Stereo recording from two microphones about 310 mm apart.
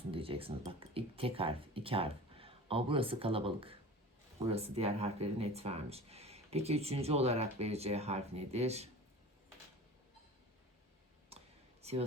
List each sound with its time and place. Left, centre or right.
0.1 s speech: centre
11.3 s clicking: centre
11.8 s a sound: centre